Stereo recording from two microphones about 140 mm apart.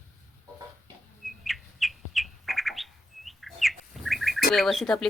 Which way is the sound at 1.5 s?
Centre (ahead or behind).